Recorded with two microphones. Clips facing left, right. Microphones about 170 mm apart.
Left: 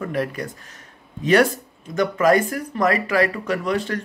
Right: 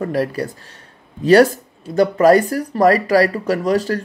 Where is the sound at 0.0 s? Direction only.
35° right (ahead or behind).